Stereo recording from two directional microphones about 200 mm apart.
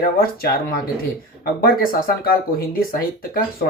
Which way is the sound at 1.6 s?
50° left (ahead or behind).